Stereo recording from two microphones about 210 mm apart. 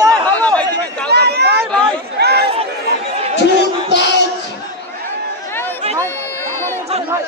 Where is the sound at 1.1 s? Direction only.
50° right (ahead or behind).